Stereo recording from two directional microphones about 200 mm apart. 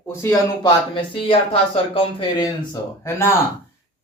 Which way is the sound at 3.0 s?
10° left (ahead or behind).